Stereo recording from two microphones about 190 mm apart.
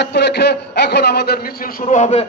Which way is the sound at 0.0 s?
65° left (ahead or behind).